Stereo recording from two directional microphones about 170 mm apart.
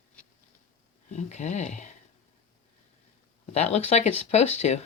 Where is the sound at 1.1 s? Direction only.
45° left (ahead or behind).